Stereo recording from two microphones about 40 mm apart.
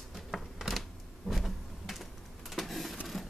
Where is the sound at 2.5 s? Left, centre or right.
Centre.